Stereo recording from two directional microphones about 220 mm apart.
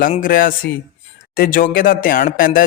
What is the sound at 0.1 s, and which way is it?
Speech, 40° left (ahead or behind).